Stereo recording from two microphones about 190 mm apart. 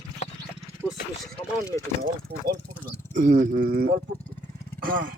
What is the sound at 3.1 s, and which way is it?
Speech, 45° right (ahead or behind).